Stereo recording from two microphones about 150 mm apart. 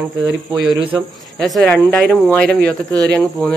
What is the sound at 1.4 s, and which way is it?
Speech, centre (ahead or behind).